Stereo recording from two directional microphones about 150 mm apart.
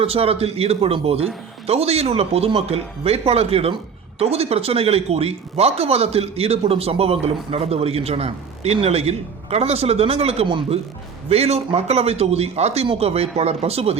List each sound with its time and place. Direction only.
0.0 s a man's voice: 40° right (ahead or behind)